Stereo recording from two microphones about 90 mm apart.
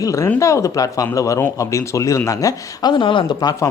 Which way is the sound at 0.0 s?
35° left (ahead or behind).